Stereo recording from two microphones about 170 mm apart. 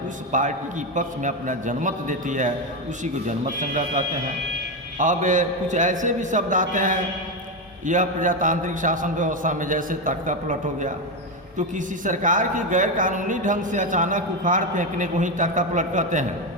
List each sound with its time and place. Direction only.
0.3 s speech: 50° right (ahead or behind)